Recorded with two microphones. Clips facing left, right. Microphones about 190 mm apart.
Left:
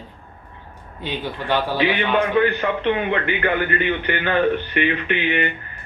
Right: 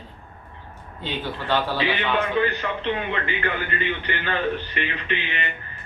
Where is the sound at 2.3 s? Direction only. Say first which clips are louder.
Left 5 dB; 55° left (ahead or behind).